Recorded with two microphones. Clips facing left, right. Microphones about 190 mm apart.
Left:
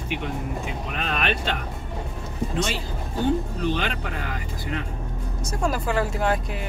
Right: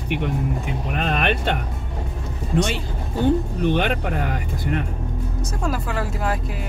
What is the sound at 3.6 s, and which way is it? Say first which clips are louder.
Speech: right 5 dB; 55° right (ahead or behind).